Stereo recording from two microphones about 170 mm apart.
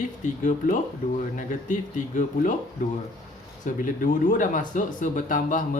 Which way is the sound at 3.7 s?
50° left (ahead or behind).